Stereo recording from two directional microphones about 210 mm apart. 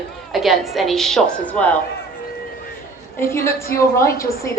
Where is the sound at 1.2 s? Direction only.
35° left (ahead or behind).